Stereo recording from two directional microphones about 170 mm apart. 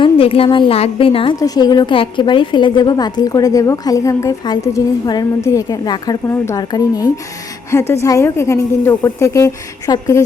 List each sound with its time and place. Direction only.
0.0 s a woman's voice: 35° left (ahead or behind)